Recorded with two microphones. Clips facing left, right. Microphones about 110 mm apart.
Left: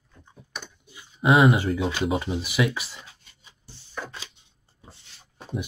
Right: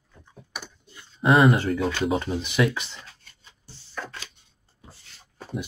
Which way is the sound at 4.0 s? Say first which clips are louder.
Even; 15° left (ahead or behind).